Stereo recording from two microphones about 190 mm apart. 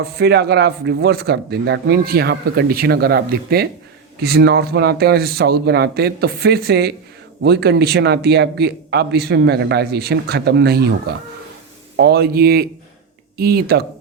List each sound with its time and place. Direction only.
0.0 s speech: 60° right (ahead or behind)
11.9 s speech: 60° right (ahead or behind)